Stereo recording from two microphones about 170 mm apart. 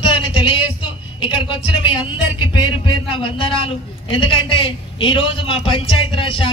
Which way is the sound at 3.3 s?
30° left (ahead or behind).